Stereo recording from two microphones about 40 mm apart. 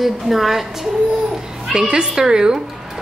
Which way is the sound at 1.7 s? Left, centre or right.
Centre.